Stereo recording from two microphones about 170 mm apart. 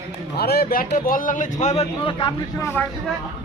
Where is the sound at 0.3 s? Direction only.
70° left (ahead or behind).